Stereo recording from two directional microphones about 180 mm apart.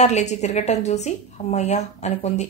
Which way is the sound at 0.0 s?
40° left (ahead or behind).